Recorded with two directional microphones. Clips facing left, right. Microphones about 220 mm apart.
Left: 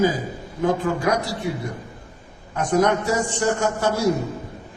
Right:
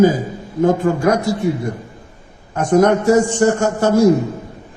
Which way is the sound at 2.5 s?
45° right (ahead or behind).